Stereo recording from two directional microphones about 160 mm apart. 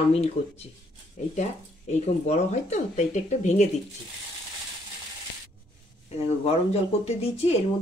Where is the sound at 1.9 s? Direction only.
45° left (ahead or behind).